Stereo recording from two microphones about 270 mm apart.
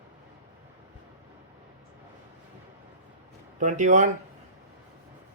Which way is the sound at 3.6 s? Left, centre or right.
Right.